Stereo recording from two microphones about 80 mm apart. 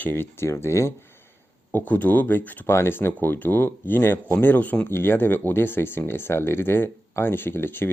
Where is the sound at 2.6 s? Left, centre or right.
Left.